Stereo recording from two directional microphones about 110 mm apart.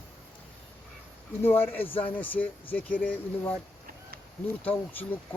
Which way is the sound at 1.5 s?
20° left (ahead or behind).